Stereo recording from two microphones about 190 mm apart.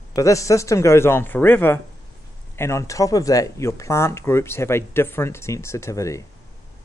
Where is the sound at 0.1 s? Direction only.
15° left (ahead or behind).